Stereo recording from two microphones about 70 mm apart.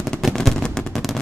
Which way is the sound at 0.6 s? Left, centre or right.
Centre.